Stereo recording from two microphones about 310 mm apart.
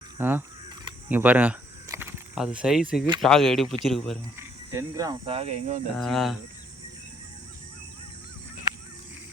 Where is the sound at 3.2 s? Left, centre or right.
Centre; by 5.8 s right.